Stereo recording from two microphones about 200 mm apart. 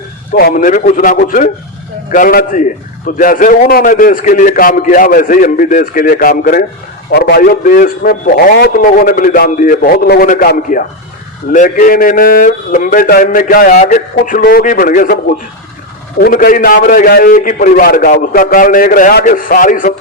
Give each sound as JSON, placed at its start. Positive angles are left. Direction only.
{"t": 0.3, "sound": "a man's voice", "side_deg": 45}
{"t": 16.2, "sound": "a man's voice", "side_deg": 45}